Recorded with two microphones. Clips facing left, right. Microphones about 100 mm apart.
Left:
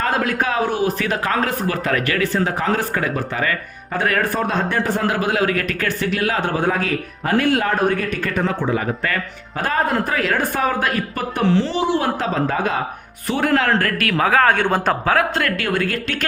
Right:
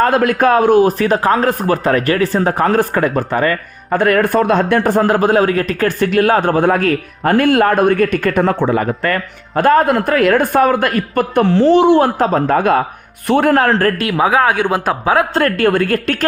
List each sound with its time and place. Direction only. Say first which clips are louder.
0.0 s a man's voice: right 8 dB; 55° right (ahead or behind)
4.9 s a man's voice: right 8 dB; 45° right (ahead or behind)
6.0 s a man's voice: right 9 dB; 50° right (ahead or behind)
14.0 s speech: right 3 dB; 15° right (ahead or behind)
15.4 s a man's voice: right 7 dB; 40° right (ahead or behind)